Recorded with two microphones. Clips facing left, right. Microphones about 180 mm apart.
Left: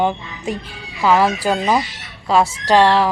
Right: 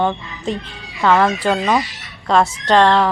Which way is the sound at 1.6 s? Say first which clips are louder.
Even; 20° left (ahead or behind).